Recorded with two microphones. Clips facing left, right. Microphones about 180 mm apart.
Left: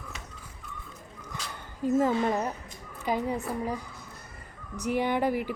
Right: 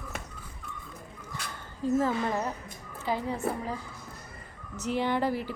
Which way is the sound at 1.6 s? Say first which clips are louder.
Left 2 dB; 15° left (ahead or behind).